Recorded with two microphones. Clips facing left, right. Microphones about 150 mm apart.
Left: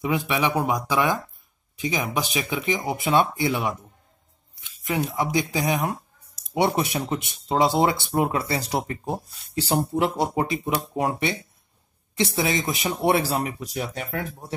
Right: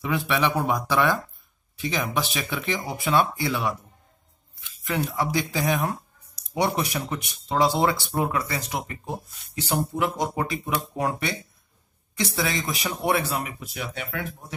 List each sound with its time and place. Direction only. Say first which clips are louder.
0.0 s speech: left 1 dB; 15° left (ahead or behind)
4.6 s a sound: left 2 dB; 15° left (ahead or behind)
5.1 s speech: left 2 dB; 15° left (ahead or behind); by 14.2 s 40° left (ahead or behind)